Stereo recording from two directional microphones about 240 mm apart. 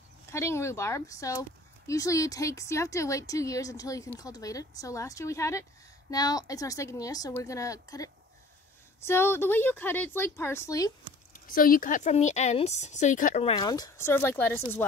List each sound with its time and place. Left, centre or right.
0.3 s speech: centre
11.3 s a woman's voice: left; by 14.9 s centre